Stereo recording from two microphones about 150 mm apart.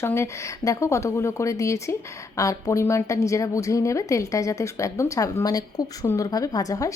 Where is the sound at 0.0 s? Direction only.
15° left (ahead or behind).